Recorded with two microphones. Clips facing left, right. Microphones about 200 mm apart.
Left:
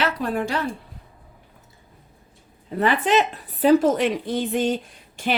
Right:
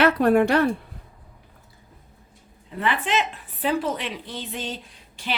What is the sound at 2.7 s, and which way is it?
Speech, 40° left (ahead or behind).